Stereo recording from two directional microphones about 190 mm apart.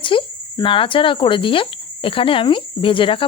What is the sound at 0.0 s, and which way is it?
Speech, 25° left (ahead or behind).